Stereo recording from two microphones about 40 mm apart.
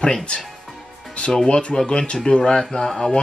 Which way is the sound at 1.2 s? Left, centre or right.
Left.